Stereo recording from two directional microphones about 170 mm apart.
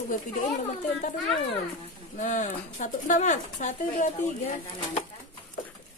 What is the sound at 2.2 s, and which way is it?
Speech, 50° left (ahead or behind).